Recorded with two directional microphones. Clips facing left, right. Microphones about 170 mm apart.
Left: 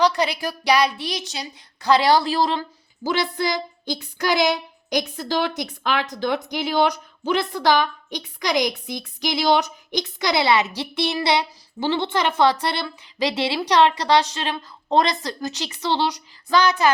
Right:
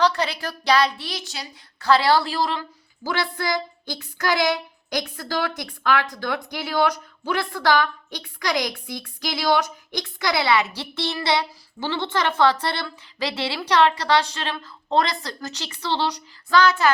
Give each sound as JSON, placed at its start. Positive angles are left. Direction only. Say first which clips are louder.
{"t": 0.0, "sound": "speech", "louder": "left 2 dB", "side_deg": 15}